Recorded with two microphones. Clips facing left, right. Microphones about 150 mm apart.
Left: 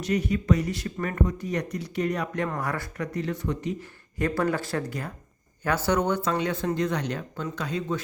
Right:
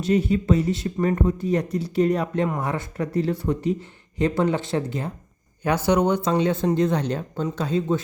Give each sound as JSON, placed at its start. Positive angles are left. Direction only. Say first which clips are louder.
{"t": 0.0, "sound": "speech", "louder": "right 5 dB", "side_deg": -30}